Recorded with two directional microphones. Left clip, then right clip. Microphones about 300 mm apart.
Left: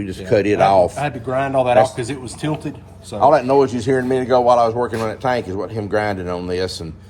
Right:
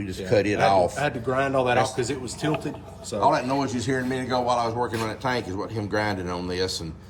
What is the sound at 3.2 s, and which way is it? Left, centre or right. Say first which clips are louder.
A man's voice: left 9 dB; centre.